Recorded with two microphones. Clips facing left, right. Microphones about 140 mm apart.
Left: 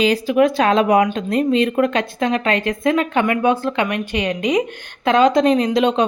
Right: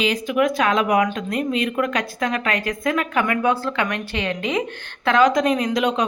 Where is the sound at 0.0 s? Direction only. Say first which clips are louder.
Left 5 dB; 35° left (ahead or behind).